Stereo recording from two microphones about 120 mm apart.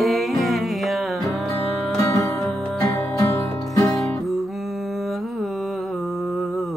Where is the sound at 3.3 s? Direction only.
30° left (ahead or behind).